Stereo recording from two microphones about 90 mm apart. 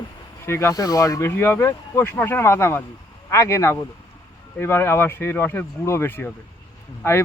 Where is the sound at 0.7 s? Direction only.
45° left (ahead or behind).